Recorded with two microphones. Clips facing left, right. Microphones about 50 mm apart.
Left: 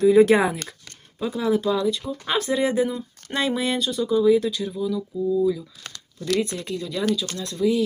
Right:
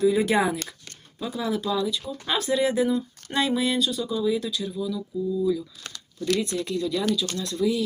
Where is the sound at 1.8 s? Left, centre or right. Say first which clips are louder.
Left 3 dB; left.